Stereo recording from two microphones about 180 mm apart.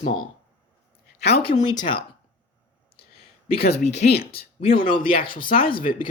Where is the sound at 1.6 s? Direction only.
25° left (ahead or behind).